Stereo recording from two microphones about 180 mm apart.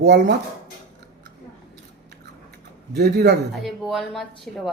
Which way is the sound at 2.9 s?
60° right (ahead or behind).